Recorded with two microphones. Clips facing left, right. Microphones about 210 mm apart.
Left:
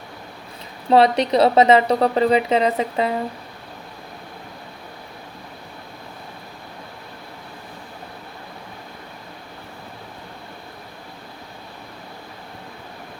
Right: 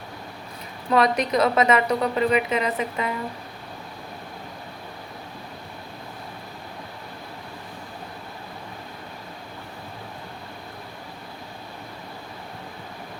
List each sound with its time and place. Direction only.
0.9 s a woman's voice: 30° left (ahead or behind)